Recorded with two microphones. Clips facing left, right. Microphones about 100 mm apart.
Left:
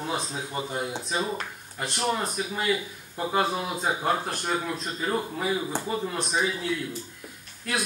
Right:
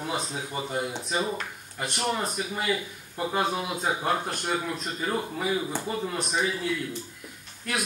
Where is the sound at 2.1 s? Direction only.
Centre (ahead or behind).